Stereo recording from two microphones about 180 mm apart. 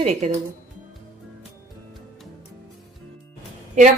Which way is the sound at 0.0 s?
40° right (ahead or behind).